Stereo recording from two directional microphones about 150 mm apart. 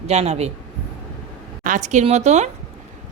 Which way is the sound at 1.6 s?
55° right (ahead or behind).